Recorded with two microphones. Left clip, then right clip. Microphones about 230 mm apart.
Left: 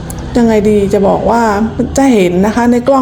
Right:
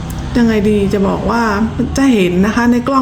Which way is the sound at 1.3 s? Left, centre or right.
Right.